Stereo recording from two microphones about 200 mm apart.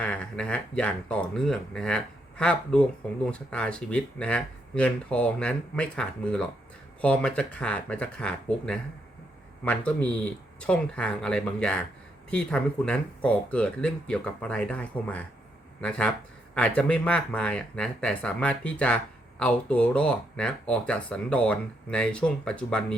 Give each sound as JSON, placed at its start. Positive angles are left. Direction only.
{"t": 0.0, "sound": "speech", "side_deg": 5}